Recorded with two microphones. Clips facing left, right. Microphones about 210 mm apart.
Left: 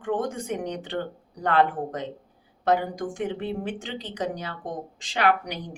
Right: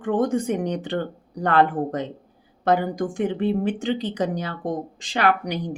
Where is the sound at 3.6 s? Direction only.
45° right (ahead or behind).